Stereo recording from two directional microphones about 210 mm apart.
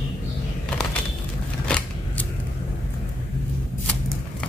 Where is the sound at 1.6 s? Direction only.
5° left (ahead or behind).